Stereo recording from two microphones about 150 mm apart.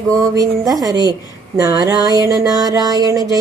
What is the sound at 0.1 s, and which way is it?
Speech, 25° right (ahead or behind).